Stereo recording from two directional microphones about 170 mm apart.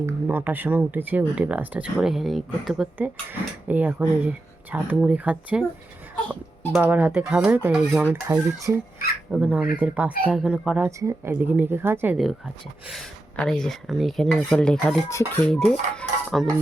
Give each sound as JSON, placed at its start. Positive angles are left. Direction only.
{"t": 0.0, "sound": "speech", "side_deg": -10}
{"t": 6.2, "sound": "speech", "side_deg": 5}
{"t": 6.8, "sound": "speech", "side_deg": -10}
{"t": 8.1, "sound": "speech", "side_deg": -20}
{"t": 9.3, "sound": "speech", "side_deg": -5}
{"t": 12.1, "sound": "speech", "side_deg": 0}